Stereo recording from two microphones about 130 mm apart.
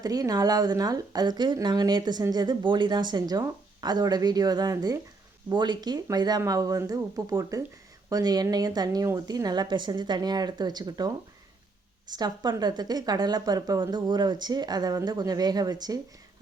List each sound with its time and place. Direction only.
0.0 s a woman's voice: 30° right (ahead or behind)